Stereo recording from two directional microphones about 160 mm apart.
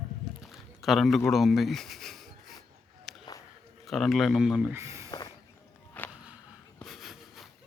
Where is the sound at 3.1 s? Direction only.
Centre (ahead or behind).